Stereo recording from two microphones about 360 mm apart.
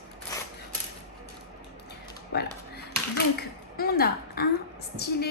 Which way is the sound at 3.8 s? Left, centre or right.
Left.